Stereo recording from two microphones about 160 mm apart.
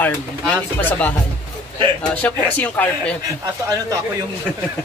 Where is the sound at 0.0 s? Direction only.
10° left (ahead or behind).